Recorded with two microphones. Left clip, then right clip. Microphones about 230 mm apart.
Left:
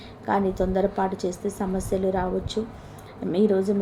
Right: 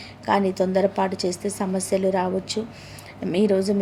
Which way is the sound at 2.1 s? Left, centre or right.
Right.